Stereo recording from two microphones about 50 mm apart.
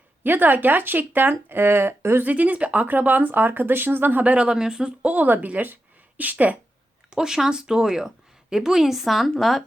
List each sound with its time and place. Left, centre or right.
0.2 s speech: right
2.2 s speech: right
4.2 s speech: right
4.4 s speech: centre; by 6.6 s right
7.1 s a woman's voice: centre